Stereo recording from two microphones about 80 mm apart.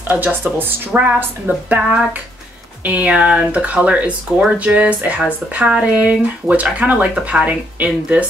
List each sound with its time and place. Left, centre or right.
0.1 s speech: right
1.8 s speech: centre